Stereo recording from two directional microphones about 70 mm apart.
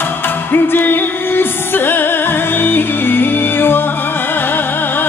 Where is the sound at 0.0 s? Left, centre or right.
Left.